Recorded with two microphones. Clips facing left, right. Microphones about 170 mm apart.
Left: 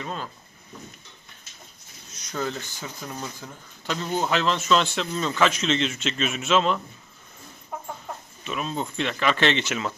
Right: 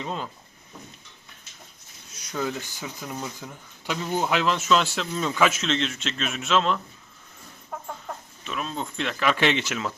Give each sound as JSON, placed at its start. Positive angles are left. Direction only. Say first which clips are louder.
{"t": 0.0, "sound": "speech", "louder": "right 1 dB", "side_deg": -20}
{"t": 2.1, "sound": "speech", "louder": "right 1 dB", "side_deg": -10}
{"t": 8.4, "sound": "speech", "louder": "left 2 dB", "side_deg": 5}